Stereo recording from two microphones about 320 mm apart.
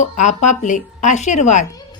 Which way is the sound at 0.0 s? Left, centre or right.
Left.